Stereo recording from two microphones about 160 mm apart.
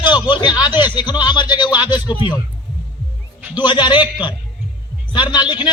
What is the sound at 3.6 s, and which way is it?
Speech, 30° left (ahead or behind).